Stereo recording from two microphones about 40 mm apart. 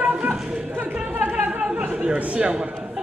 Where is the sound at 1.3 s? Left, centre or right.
Right.